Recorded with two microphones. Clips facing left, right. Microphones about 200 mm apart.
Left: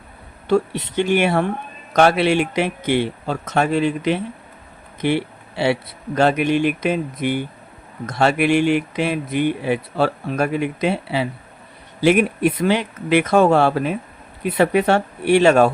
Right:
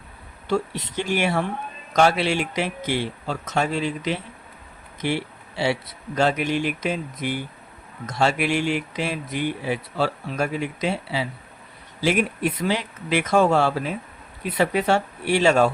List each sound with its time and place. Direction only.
0.4 s speech: 60° left (ahead or behind)
4.9 s a sound: 60° left (ahead or behind)
6.1 s speech: 60° left (ahead or behind)